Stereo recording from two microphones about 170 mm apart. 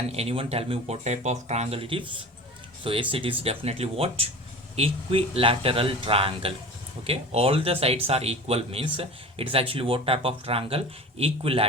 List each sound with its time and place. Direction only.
0.1 s speech: 35° right (ahead or behind)